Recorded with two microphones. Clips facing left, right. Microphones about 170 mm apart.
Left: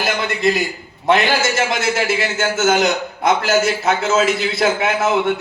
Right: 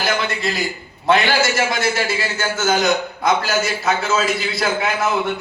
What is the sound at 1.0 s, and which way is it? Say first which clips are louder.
A man's voice: left 1 dB; 20° left (ahead or behind).